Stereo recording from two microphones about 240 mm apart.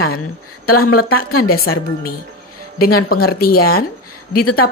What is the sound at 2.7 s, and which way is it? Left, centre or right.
Speech, left.